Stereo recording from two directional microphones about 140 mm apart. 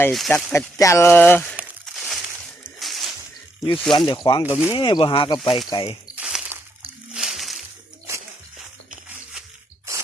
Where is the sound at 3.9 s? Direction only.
35° left (ahead or behind).